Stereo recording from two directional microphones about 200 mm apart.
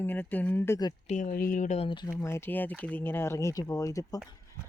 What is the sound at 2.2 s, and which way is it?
Speech, 10° left (ahead or behind).